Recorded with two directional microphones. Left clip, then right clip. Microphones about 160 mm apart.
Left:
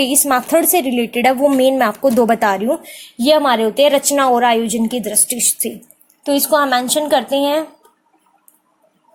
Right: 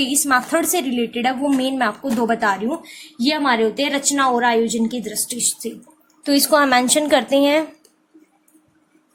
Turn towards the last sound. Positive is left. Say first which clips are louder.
# even
turn(degrees=5)  # may be behind; listen again after turning